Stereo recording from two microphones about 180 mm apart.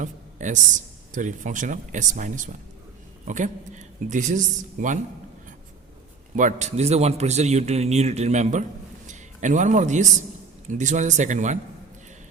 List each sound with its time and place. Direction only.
0.0 s a sound: 45° right (ahead or behind)
1.1 s speech: 45° right (ahead or behind)
6.3 s a man's voice: 45° right (ahead or behind)